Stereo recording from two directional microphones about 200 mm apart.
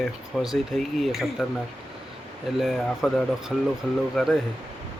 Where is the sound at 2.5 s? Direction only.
Centre (ahead or behind).